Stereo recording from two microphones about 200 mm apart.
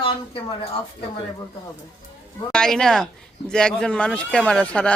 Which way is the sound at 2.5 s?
5° left (ahead or behind).